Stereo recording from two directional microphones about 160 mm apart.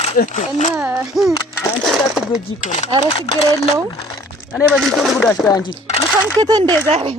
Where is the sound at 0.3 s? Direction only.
50° left (ahead or behind).